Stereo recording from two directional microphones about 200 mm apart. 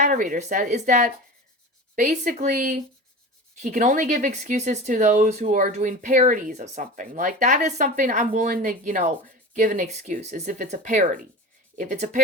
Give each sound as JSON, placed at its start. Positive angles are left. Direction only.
{"t": 0.0, "sound": "speech", "side_deg": -40}